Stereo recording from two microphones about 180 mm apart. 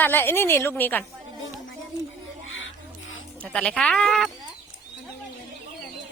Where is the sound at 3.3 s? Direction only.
5° left (ahead or behind).